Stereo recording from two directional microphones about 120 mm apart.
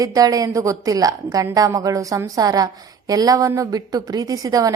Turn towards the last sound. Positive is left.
turn(degrees=-30)  # may be behind; listen again after turning